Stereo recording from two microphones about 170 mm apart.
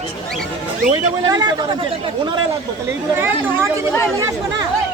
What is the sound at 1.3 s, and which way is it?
Speech, 25° right (ahead or behind).